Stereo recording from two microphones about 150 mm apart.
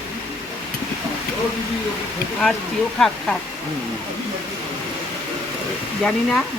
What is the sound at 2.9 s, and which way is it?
Speech, 5° left (ahead or behind).